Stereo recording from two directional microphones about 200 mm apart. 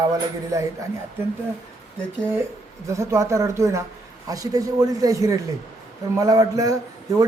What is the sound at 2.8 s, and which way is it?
A man's voice, 15° right (ahead or behind).